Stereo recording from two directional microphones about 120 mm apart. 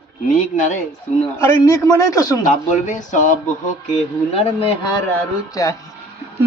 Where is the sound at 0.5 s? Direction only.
90° left.